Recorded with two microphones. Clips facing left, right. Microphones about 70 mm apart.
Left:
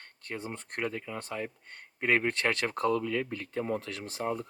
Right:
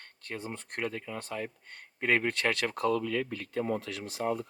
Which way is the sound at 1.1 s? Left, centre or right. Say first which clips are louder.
Even; left.